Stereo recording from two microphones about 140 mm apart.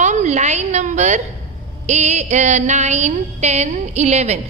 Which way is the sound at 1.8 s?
55° right (ahead or behind).